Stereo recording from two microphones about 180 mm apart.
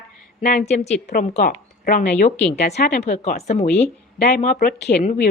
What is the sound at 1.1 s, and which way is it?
A woman's voice, 50° left (ahead or behind).